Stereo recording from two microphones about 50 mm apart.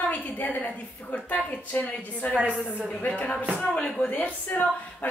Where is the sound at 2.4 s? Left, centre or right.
Right.